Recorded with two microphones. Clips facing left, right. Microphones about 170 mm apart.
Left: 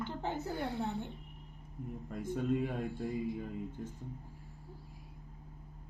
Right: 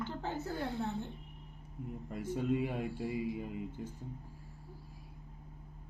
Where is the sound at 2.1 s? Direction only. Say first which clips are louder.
Even; 5° right (ahead or behind).